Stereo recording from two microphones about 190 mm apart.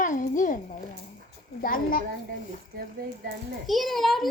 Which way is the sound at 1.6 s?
45° left (ahead or behind).